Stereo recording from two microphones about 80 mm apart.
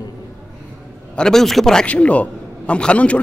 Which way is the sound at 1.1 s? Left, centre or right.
Centre.